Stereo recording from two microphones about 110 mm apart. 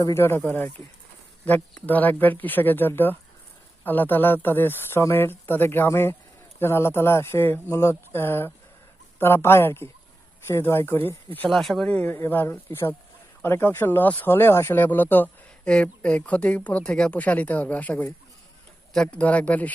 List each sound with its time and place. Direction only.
0.0 s speech: 25° left (ahead or behind)
11.4 s speech: centre (ahead or behind)